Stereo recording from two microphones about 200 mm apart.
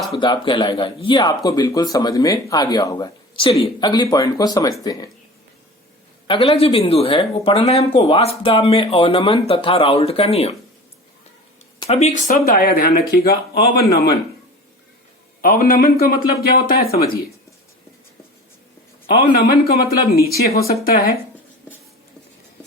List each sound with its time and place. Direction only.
0.2 s speech: 25° left (ahead or behind)
6.2 s speech: 25° left (ahead or behind)
11.8 s speech: 30° left (ahead or behind); by 14.2 s 50° left (ahead or behind)
15.4 s speech: 45° left (ahead or behind)
19.4 s speech: 50° left (ahead or behind)